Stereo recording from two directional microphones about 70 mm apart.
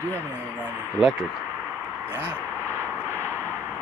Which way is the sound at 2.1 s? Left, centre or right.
Right.